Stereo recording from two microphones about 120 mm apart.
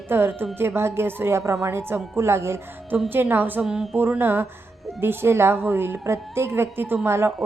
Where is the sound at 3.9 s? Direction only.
15° right (ahead or behind).